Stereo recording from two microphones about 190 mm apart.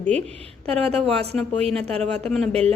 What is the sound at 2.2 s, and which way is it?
Speech, centre (ahead or behind).